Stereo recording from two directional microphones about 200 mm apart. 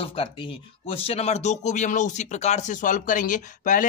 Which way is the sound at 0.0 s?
25° left (ahead or behind).